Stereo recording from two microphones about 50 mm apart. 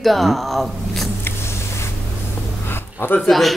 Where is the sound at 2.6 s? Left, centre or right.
Left.